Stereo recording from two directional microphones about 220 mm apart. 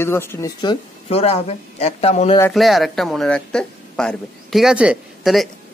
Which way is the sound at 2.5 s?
Centre (ahead or behind).